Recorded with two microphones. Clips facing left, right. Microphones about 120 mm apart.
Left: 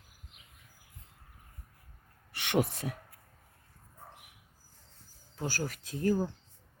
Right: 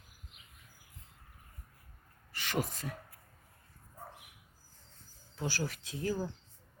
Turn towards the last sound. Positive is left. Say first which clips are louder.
# left 6 dB
turn(degrees=45)  # may be behind; listen again after turning